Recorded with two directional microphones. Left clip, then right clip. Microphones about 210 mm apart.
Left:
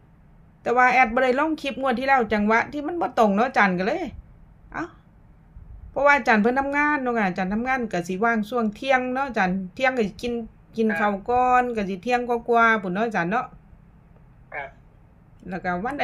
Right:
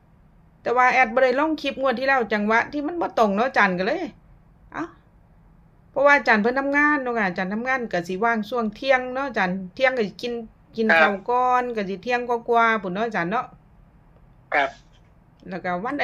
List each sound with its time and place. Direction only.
0.6 s a woman's voice: 5° left (ahead or behind)
5.9 s a woman's voice: 5° left (ahead or behind)
10.8 s speech: 60° right (ahead or behind)
11.1 s a woman's voice: centre (ahead or behind)
15.4 s a woman's voice: centre (ahead or behind)